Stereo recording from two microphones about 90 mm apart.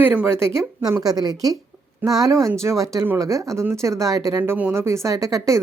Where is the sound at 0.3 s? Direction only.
30° right (ahead or behind).